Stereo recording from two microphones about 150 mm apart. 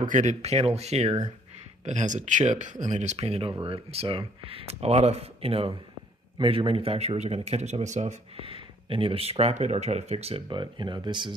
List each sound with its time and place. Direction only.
0.0 s speech: 55° right (ahead or behind)
8.4 s speech: 35° right (ahead or behind)